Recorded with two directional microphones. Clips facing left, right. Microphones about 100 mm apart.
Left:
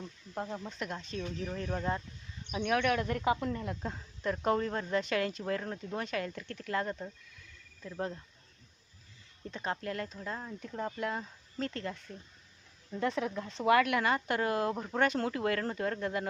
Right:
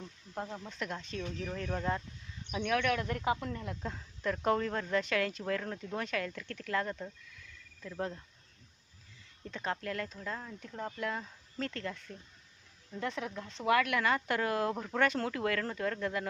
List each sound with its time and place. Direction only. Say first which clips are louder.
0.3 s speech: left 2 dB; 10° left (ahead or behind)
0.9 s speech: right 1 dB; 5° left (ahead or behind)
2.5 s speech: left 1 dB; 20° left (ahead or behind)
3.8 s speech: right 2 dB; 15° left (ahead or behind)
9.5 s speech: left 1 dB; 15° left (ahead or behind)
13.0 s speech: left 5 dB; 40° left (ahead or behind); by 14.8 s 10° left (ahead or behind)
14.8 s speech: left 1 dB; 20° left (ahead or behind)